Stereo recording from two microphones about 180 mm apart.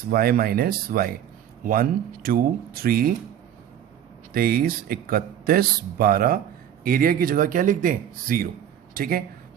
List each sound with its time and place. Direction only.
0.0 s speech: 55° right (ahead or behind)
4.4 s speech: 55° right (ahead or behind)